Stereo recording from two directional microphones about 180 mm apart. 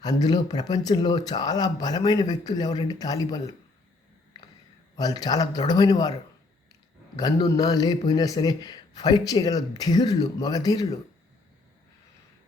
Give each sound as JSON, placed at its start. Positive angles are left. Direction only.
{"t": 0.0, "sound": "a man's voice", "side_deg": 20}
{"t": 4.9, "sound": "a man's voice", "side_deg": 20}
{"t": 7.2, "sound": "a man's voice", "side_deg": 20}